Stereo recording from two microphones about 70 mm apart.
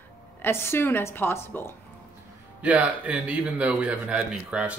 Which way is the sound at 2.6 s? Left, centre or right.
Right.